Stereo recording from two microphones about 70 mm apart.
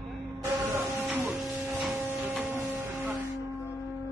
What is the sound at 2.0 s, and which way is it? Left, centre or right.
Printer, right.